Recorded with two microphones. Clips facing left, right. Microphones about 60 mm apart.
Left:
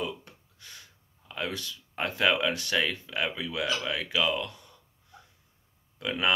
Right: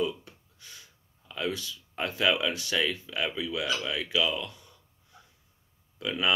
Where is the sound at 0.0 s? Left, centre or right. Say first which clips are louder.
Right 4 dB; left.